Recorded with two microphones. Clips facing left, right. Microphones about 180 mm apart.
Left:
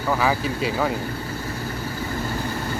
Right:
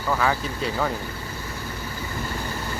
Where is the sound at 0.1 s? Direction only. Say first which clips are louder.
Left 2 dB; 10° left (ahead or behind).